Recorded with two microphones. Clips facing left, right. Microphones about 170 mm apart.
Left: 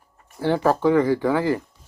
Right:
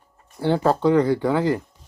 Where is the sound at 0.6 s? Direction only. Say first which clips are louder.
Even; 15° right (ahead or behind).